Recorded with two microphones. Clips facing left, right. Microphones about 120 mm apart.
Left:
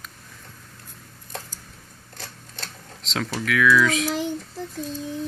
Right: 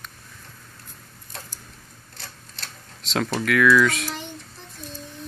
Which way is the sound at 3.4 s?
Centre (ahead or behind).